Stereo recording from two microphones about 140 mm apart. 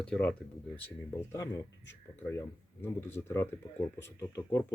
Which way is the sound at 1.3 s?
20° left (ahead or behind).